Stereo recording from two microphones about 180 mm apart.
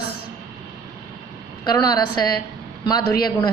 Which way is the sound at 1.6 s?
20° left (ahead or behind).